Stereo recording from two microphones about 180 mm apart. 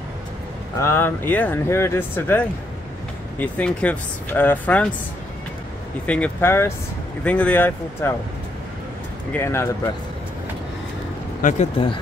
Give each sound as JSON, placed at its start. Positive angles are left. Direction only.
{"t": 0.7, "sound": "speech", "side_deg": 15}
{"t": 6.0, "sound": "speech", "side_deg": 5}
{"t": 9.3, "sound": "speech", "side_deg": 15}
{"t": 11.4, "sound": "speech", "side_deg": 40}